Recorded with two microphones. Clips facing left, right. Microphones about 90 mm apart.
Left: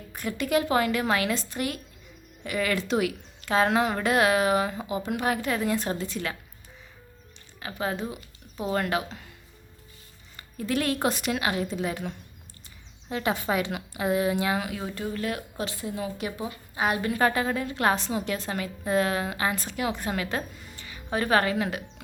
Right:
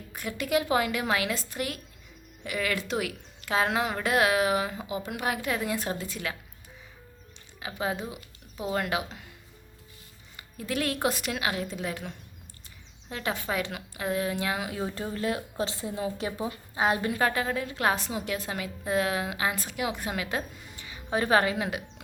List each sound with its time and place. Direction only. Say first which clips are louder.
0.1 s speech: left 2 dB; 5° right (ahead or behind)
7.6 s speech: left 1 dB; 10° right (ahead or behind)
10.3 s speech: left 3 dB; 5° right (ahead or behind)
14.6 s a woman's voice: even; 25° right (ahead or behind)
17.2 s a woman's voice: left 3 dB; centre (ahead or behind); by 21.8 s 15° right (ahead or behind)